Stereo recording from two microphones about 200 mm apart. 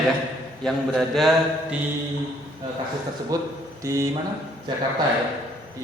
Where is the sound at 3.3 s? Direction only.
20° right (ahead or behind).